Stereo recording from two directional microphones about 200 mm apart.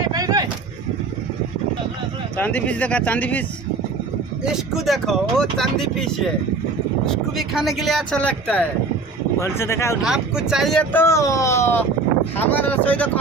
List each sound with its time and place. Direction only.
0.1 s a sound: 20° right (ahead or behind)
2.4 s speech: 5° left (ahead or behind)
4.4 s speech: centre (ahead or behind)
7.0 s speech: centre (ahead or behind)
10.0 s speech: 5° right (ahead or behind)